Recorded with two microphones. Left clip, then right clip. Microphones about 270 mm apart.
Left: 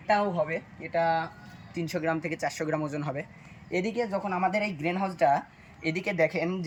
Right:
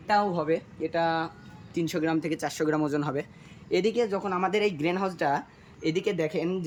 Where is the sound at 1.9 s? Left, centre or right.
Centre.